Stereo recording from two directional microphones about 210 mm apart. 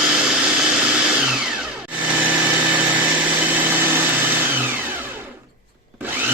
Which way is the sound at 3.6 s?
10° right (ahead or behind).